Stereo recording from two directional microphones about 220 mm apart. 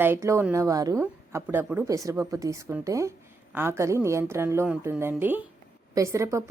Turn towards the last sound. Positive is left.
turn(degrees=-15)  # may be behind; listen again after turning